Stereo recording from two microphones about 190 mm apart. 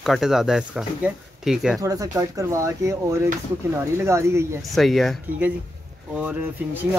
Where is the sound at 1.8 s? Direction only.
20° right (ahead or behind).